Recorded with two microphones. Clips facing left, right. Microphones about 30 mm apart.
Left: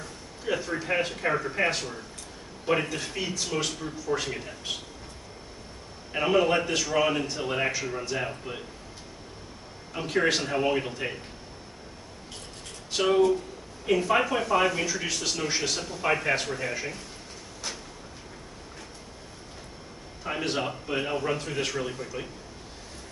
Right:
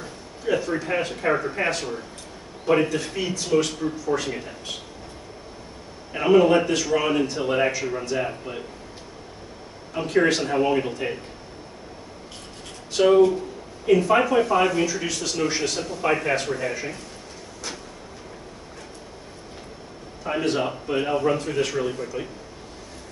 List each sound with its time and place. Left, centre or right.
0.5 s a man's voice: centre
6.1 s a man's voice: centre
10.0 s a man's voice: centre
13.0 s a man's voice: centre
20.2 s a man's voice: centre